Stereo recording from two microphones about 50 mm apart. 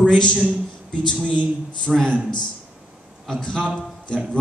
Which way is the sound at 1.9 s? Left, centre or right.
Centre.